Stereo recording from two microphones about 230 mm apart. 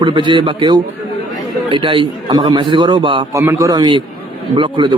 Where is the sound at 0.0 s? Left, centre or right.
Right.